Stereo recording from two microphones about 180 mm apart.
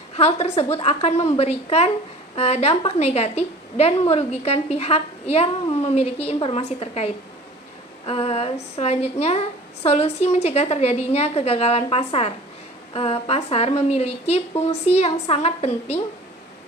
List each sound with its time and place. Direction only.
0.1 s a woman's voice: 35° left (ahead or behind)